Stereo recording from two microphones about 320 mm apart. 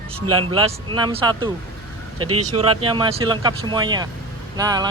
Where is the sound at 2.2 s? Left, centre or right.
Right.